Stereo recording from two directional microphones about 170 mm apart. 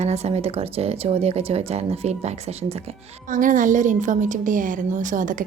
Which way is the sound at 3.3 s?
50° right (ahead or behind).